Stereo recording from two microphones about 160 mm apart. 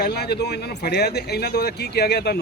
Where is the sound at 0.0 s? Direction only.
80° left.